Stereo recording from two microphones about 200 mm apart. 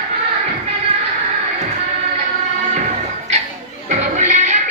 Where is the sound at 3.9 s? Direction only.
35° right (ahead or behind).